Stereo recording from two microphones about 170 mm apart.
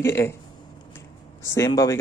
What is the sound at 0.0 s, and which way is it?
Speech, 15° left (ahead or behind).